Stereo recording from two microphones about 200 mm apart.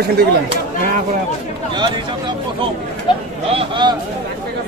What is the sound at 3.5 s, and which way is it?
Speech, 25° right (ahead or behind).